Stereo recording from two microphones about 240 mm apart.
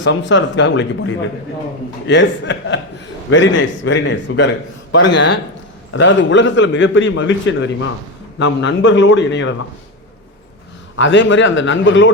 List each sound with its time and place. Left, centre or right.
0.0 s a man's voice: left
10.9 s a man's voice: left